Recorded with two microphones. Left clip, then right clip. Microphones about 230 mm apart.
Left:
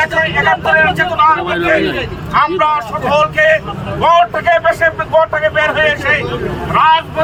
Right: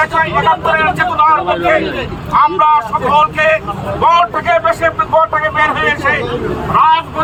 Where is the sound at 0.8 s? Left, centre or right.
Centre.